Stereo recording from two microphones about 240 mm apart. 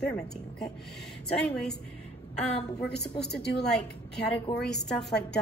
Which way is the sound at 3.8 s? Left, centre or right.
Centre.